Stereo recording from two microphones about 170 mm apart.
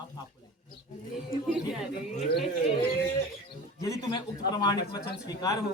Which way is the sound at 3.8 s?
20° left (ahead or behind).